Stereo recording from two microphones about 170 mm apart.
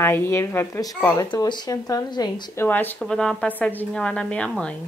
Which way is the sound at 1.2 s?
25° left (ahead or behind).